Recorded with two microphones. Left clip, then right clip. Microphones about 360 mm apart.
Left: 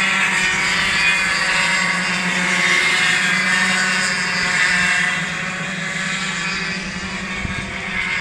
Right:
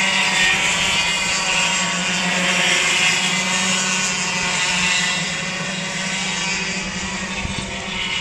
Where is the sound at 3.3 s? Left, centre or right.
Centre.